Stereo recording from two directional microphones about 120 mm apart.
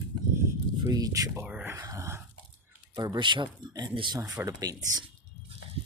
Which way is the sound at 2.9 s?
35° right (ahead or behind).